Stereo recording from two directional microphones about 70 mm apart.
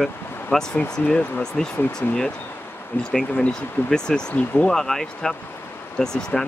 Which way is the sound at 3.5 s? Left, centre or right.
Centre.